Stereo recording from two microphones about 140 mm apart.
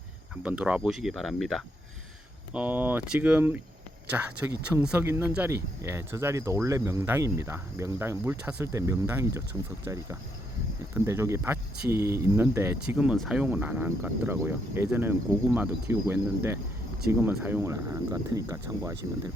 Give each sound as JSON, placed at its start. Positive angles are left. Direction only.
{"t": 0.4, "sound": "speech", "side_deg": -10}
{"t": 2.5, "sound": "speech", "side_deg": -10}